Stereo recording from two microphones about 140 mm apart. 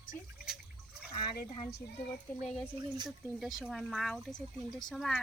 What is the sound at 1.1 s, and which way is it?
Speech, 35° left (ahead or behind).